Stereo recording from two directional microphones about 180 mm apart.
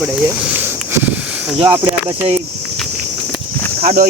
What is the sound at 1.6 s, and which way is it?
Speech, 15° right (ahead or behind).